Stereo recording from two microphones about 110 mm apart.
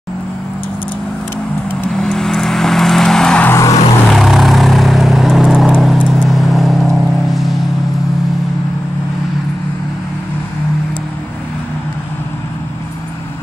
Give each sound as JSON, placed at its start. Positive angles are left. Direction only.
{"t": 1.9, "sound": "vehicle", "side_deg": 5}
{"t": 3.4, "sound": "vehicle", "side_deg": 25}
{"t": 4.1, "sound": "vehicle", "side_deg": 0}